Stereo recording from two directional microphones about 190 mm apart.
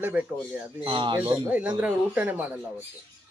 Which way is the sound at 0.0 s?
10° right (ahead or behind).